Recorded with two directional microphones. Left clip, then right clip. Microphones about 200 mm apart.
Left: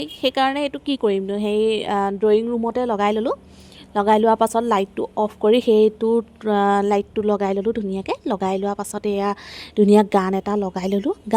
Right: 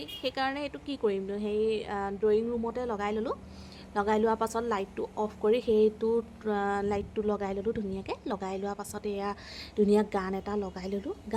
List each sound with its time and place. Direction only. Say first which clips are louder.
0.0 s speech: left 12 dB; 45° left (ahead or behind)